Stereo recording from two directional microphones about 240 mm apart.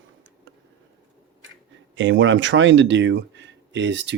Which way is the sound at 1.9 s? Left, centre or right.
Right.